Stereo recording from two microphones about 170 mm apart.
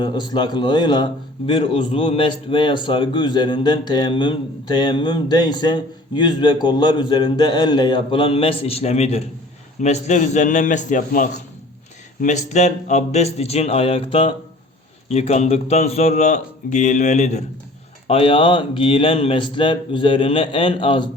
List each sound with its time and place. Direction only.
0.0 s a man's voice: 25° left (ahead or behind)
18.1 s speech: 30° left (ahead or behind)